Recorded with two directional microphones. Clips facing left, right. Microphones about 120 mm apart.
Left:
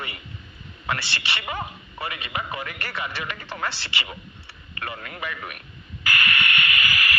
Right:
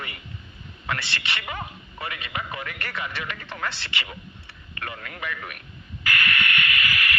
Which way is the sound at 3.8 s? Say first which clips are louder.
Left 1 dB; 5° left (ahead or behind).